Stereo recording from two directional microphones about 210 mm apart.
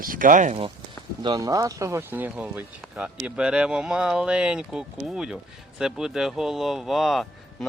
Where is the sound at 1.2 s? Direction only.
20° right (ahead or behind).